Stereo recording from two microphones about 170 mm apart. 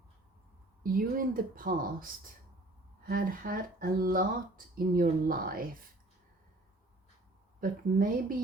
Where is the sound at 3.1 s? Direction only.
60° right (ahead or behind).